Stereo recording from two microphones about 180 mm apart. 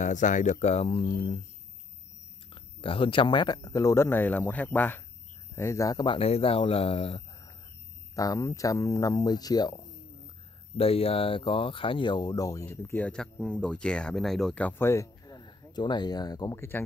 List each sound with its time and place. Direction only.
0.0 s speech: 45° left (ahead or behind)
2.5 s speech: 30° left (ahead or behind)
8.1 s speech: 20° left (ahead or behind)
10.8 s speech: 30° left (ahead or behind); by 16.8 s 15° left (ahead or behind)